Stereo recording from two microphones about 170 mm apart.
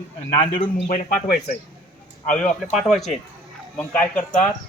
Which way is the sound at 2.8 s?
Centre (ahead or behind).